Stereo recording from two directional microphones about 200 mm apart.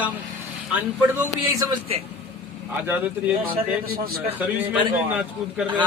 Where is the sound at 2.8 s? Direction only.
10° right (ahead or behind).